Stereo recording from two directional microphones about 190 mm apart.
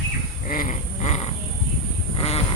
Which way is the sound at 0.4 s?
45° left (ahead or behind).